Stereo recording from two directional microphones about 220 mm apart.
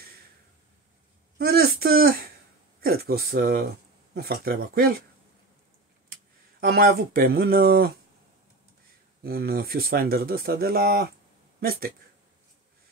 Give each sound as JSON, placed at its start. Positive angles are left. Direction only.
{"t": 1.4, "sound": "a sound", "side_deg": -45}
{"t": 2.8, "sound": "speech", "side_deg": -45}
{"t": 6.6, "sound": "speech", "side_deg": -45}
{"t": 9.2, "sound": "speech", "side_deg": -45}